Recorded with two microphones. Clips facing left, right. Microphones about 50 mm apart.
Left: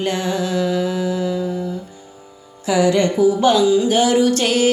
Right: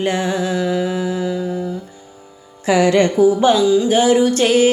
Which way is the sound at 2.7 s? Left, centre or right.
Right.